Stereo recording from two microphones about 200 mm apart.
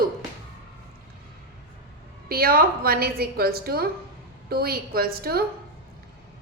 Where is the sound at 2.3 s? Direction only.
50° right (ahead or behind).